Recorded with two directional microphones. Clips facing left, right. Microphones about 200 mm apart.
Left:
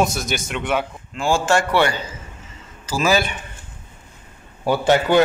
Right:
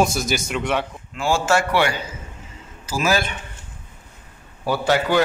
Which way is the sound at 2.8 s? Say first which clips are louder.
Left 2 dB; 10° right (ahead or behind).